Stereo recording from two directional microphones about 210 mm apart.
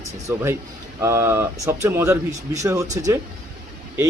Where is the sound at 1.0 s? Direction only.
15° right (ahead or behind).